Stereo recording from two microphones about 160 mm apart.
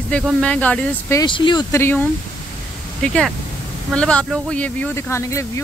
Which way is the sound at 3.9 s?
5° left (ahead or behind).